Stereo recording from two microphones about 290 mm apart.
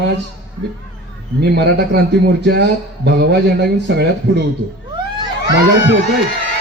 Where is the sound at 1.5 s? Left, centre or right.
Right.